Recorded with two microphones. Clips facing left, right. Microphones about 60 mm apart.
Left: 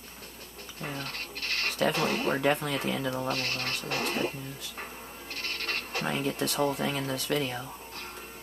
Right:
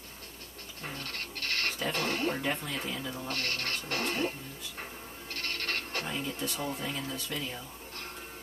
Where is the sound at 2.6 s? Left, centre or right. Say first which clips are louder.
Left 6 dB; left.